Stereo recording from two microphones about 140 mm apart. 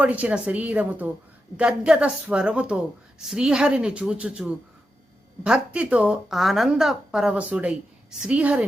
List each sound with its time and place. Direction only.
0.0 s a woman's voice: 10° right (ahead or behind)